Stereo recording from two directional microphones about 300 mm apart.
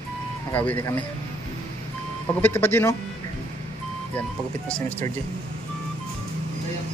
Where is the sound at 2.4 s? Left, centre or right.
Centre.